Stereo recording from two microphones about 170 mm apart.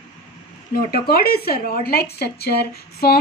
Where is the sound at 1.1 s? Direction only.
65° left (ahead or behind).